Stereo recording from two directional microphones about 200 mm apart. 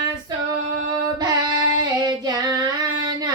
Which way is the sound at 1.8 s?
20° right (ahead or behind).